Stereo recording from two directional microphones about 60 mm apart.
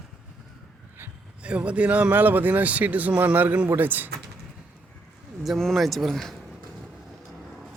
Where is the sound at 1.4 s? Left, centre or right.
Centre.